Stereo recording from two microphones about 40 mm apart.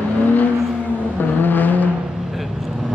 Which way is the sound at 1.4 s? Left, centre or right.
Left.